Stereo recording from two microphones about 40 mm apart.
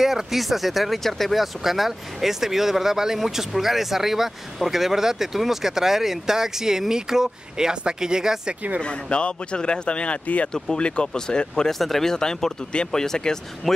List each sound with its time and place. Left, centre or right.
0.0 s speech: centre
8.8 s speech: left
10.5 s speech: left